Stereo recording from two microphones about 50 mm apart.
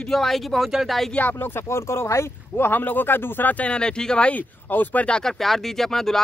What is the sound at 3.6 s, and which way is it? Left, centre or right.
Speech, centre.